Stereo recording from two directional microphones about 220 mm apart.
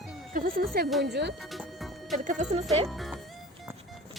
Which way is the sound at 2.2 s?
35° right (ahead or behind).